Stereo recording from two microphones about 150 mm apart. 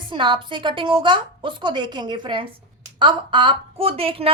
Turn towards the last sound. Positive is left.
turn(degrees=-40)  # may be behind; listen again after turning